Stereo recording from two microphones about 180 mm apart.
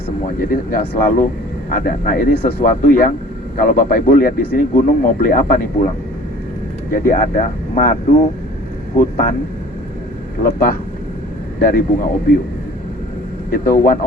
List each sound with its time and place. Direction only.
0.3 s a man's voice: 55° left (ahead or behind)
6.9 s a man's voice: 50° left (ahead or behind)
9.0 s a man's voice: 50° left (ahead or behind)
10.4 s a man's voice: 50° left (ahead or behind)
13.5 s a man's voice: 50° left (ahead or behind)